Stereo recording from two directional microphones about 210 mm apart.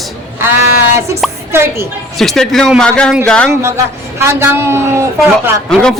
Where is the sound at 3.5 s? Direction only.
10° right (ahead or behind).